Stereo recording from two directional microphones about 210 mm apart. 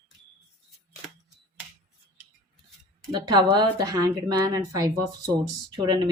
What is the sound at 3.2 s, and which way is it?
A woman's voice, 20° right (ahead or behind).